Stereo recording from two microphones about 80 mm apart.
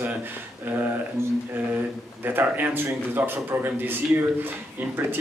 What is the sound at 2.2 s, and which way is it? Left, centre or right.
A man's voice, right.